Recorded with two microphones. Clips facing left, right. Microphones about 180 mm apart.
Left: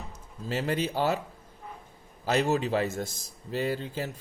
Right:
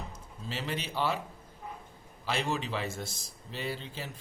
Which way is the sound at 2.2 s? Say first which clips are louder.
Left 7 dB; 45° left (ahead or behind).